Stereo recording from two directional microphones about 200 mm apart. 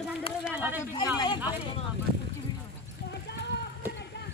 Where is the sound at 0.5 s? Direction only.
5° right (ahead or behind).